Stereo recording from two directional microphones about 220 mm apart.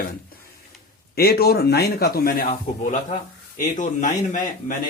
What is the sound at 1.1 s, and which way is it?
A man's voice, 45° left (ahead or behind).